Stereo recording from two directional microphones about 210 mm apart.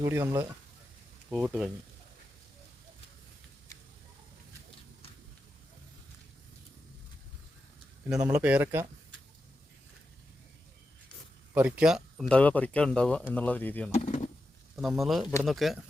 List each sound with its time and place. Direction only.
0.0 s speech: 15° right (ahead or behind)
8.1 s speech: 5° right (ahead or behind)
11.5 s speech: 5° right (ahead or behind); by 13.9 s 10° left (ahead or behind)
13.9 s a sound: 35° left (ahead or behind)
14.8 s speech: centre (ahead or behind)